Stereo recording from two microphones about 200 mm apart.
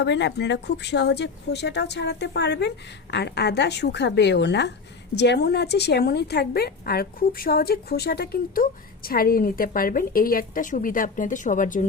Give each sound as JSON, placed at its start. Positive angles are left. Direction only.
{"t": 0.0, "sound": "a woman's voice", "side_deg": 60}